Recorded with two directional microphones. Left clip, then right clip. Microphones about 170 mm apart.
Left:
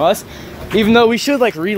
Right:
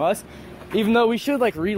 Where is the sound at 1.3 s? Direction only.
15° right (ahead or behind).